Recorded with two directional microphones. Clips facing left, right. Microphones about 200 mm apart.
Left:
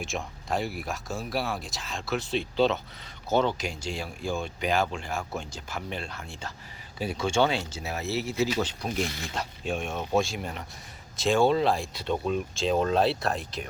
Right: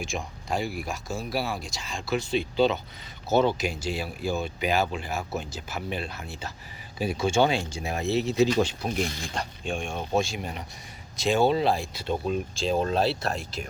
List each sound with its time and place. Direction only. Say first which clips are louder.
0.0 s speech: right 1 dB; centre (ahead or behind); by 8.4 s 20° right (ahead or behind)
9.2 s speech: even; 5° left (ahead or behind)
10.4 s speech: right 1 dB; 15° right (ahead or behind)
11.2 s speech: even; centre (ahead or behind)
12.7 s speech: left 1 dB; 35° right (ahead or behind)
13.1 s speech: left 1 dB; centre (ahead or behind)